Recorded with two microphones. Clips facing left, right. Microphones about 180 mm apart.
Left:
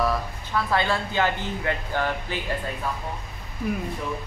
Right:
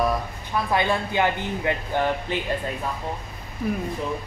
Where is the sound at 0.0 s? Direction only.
20° right (ahead or behind).